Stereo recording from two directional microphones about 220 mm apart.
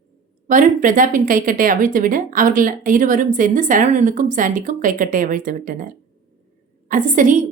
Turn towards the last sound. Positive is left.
turn(degrees=-35)  # may be behind; listen again after turning